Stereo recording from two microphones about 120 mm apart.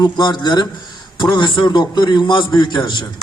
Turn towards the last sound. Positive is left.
turn(degrees=40)  # may be behind; listen again after turning